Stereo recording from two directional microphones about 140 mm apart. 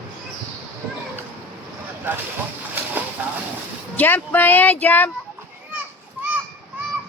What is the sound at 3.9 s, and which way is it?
Speech, 10° left (ahead or behind).